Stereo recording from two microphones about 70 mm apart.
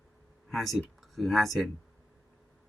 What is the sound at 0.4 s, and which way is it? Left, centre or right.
Speech, centre.